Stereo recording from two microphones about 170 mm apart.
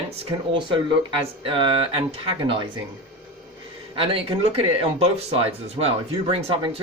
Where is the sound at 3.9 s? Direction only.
30° right (ahead or behind).